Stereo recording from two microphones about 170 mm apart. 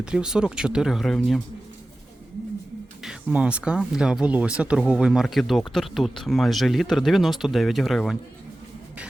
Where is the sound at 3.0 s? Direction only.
5° right (ahead or behind).